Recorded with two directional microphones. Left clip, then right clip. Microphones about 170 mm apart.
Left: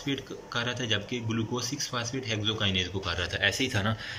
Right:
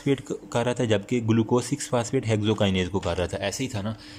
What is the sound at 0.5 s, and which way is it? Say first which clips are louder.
Speech: right 6 dB; 45° right (ahead or behind).